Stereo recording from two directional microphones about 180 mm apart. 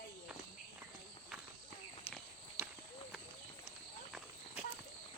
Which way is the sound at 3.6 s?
5° right (ahead or behind).